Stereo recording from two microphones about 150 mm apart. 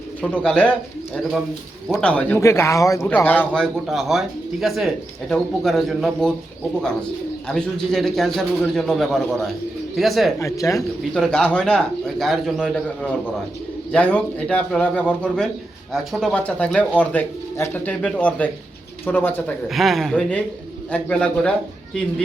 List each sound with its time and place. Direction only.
0.2 s speech: 10° left (ahead or behind)
2.4 s a man's voice: 20° left (ahead or behind); by 6.3 s centre (ahead or behind)
7.4 s a man's voice: 5° left (ahead or behind)
10.4 s speech: 20° left (ahead or behind)
10.8 s a man's voice: 5° left (ahead or behind)
19.6 s a man's voice: centre (ahead or behind)